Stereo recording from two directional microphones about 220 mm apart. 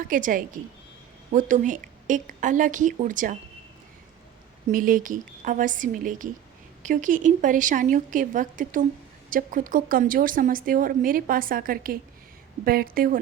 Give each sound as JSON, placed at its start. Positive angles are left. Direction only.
{"t": 0.1, "sound": "speech", "side_deg": -40}
{"t": 4.7, "sound": "speech", "side_deg": -40}